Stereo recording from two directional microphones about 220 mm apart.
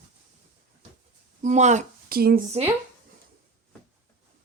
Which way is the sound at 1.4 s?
30° right (ahead or behind).